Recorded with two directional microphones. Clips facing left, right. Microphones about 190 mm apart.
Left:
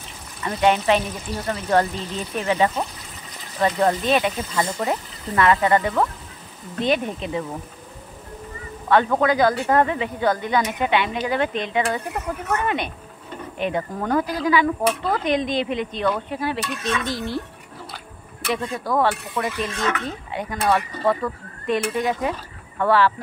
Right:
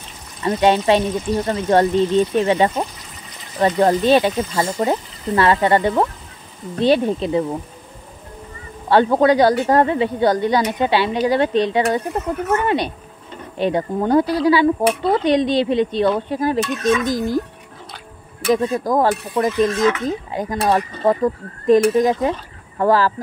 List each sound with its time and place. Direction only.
0.4 s speech: 30° right (ahead or behind)
8.8 s speech: 30° right (ahead or behind)
16.3 s speech: 40° right (ahead or behind)
18.7 s speech: 40° right (ahead or behind)